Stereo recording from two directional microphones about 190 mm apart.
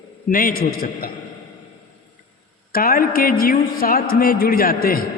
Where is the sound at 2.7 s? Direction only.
50° left (ahead or behind).